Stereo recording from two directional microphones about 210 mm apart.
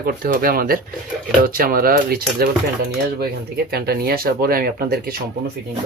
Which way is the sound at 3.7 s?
50° right (ahead or behind).